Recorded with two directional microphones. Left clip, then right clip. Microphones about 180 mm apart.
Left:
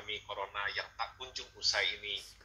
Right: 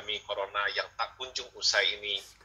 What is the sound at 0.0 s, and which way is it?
A man's voice, 20° right (ahead or behind).